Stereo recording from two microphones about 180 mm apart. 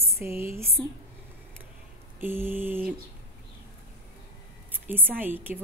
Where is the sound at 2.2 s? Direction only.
10° right (ahead or behind).